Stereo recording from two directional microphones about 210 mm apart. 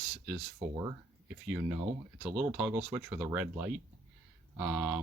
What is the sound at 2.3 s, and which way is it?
Speech, 5° right (ahead or behind).